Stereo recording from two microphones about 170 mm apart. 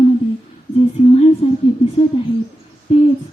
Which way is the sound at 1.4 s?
35° left (ahead or behind).